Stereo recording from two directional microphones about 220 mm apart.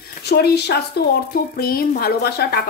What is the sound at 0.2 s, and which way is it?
Speech, 50° left (ahead or behind).